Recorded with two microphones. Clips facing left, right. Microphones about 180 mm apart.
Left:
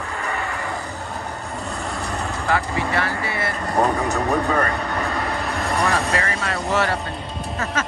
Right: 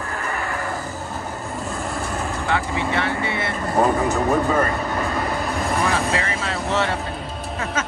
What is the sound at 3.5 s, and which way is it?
Vehicle, centre (ahead or behind).